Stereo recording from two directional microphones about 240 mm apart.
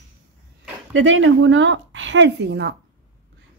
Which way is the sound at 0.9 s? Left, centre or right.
Right.